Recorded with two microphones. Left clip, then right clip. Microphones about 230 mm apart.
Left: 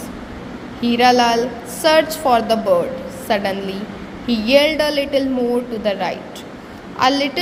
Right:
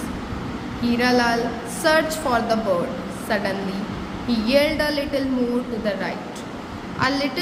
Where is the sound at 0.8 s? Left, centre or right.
Left.